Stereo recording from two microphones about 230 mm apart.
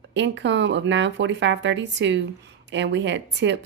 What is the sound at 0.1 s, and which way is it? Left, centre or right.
Speech, right.